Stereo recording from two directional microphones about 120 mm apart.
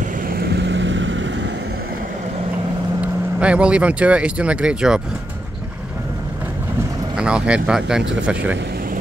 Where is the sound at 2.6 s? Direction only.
40° right (ahead or behind).